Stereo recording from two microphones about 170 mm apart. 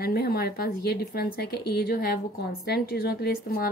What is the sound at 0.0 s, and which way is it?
A woman's voice, 65° left (ahead or behind).